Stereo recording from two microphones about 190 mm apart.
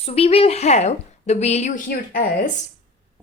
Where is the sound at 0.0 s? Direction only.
30° left (ahead or behind).